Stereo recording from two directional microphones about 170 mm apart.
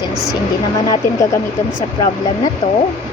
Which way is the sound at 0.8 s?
25° left (ahead or behind).